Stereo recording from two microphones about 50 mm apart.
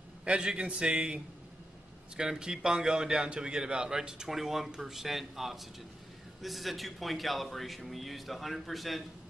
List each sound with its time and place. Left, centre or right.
0.2 s a man's voice: centre